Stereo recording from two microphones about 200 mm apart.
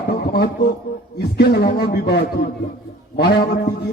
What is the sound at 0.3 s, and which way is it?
A man's voice, 55° left (ahead or behind).